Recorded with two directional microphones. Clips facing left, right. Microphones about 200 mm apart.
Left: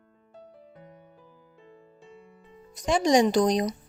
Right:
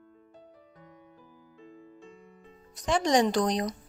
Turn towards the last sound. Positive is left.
turn(degrees=15)  # may be behind; listen again after turning